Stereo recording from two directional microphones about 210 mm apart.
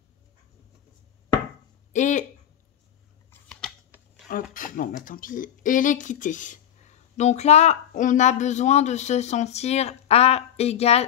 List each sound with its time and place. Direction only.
1.9 s speech: 35° left (ahead or behind)
3.3 s scissors: 5° left (ahead or behind)
4.3 s speech: 40° left (ahead or behind)